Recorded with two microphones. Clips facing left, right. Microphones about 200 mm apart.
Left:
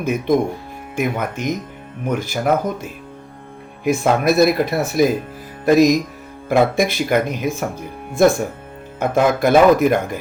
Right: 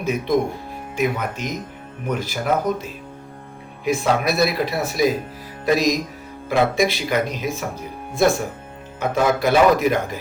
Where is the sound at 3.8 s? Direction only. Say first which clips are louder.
Left 4 dB; 50° left (ahead or behind).